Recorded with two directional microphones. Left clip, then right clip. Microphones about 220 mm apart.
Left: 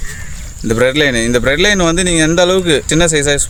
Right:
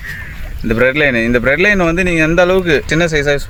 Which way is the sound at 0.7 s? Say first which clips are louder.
Even; 20° left (ahead or behind).